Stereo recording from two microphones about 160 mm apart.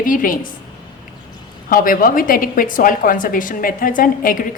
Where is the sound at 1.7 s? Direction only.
60° left (ahead or behind).